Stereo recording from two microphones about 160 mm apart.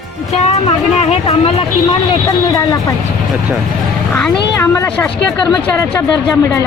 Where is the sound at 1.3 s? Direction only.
35° left (ahead or behind).